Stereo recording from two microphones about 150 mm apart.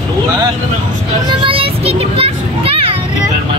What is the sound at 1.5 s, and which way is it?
Children playing, 40° right (ahead or behind).